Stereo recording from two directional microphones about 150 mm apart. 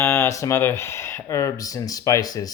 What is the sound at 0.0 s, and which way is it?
Speech, 15° left (ahead or behind).